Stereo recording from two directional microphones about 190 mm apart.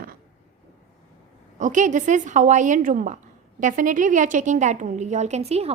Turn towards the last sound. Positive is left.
turn(degrees=-35)  # may be behind; listen again after turning